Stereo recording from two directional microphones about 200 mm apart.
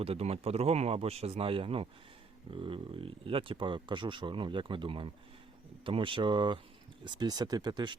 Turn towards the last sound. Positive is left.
turn(degrees=-20)  # may be behind; listen again after turning